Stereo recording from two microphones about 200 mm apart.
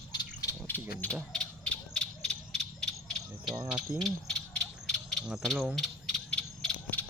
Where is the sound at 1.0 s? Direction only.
5° left (ahead or behind).